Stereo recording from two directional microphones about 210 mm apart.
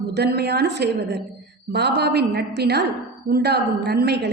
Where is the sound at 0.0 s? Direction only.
50° right (ahead or behind).